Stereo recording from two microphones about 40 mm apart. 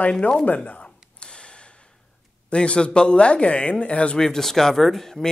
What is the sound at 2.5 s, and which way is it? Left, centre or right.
Speech, left.